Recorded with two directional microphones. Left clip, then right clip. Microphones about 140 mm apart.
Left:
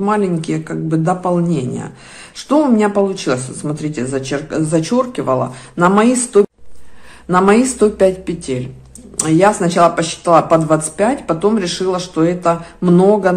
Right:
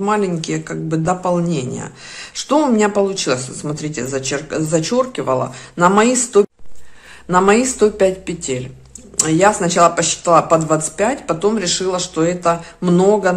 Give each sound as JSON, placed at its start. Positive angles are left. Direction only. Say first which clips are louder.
{"t": 0.0, "sound": "speech", "louder": "left 1 dB", "side_deg": -15}